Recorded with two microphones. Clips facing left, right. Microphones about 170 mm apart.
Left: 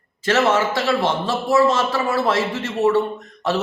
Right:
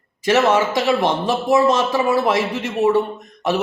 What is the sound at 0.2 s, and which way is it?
A man's voice, 15° right (ahead or behind).